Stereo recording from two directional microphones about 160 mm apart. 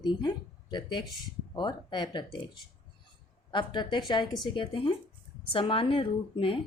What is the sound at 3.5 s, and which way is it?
Speech, 30° left (ahead or behind).